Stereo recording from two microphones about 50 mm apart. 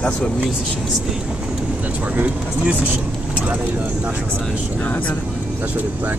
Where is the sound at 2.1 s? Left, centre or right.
Right.